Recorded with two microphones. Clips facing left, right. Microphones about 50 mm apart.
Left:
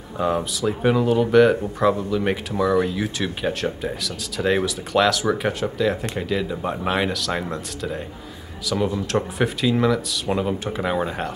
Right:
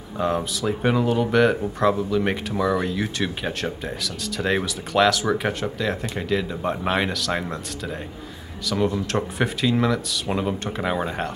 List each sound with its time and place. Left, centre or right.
0.2 s speech: centre